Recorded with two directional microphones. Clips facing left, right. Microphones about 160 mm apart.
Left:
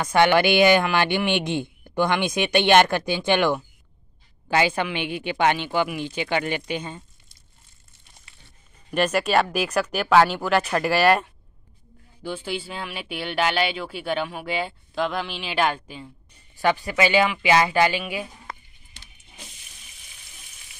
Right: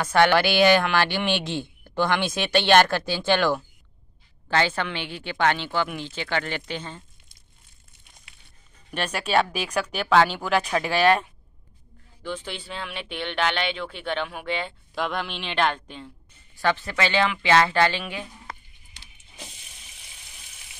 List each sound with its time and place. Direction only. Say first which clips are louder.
0.0 s speech: left 1 dB; 15° left (ahead or behind)
8.9 s speech: left 3 dB; 5° left (ahead or behind)